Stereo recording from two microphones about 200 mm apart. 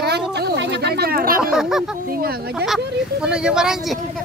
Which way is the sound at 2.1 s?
50° right (ahead or behind).